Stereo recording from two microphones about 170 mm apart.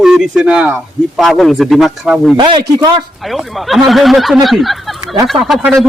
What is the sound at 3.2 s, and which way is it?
Speech, centre (ahead or behind).